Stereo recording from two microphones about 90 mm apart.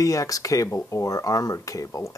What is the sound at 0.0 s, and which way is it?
Speech, 40° left (ahead or behind).